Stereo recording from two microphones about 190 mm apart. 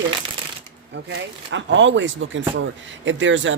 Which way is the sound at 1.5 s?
75° right (ahead or behind).